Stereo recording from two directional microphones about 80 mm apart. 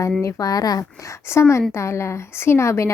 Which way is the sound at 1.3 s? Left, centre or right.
Left.